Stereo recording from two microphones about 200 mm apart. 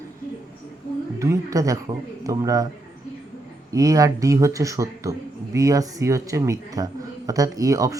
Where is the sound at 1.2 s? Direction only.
15° right (ahead or behind).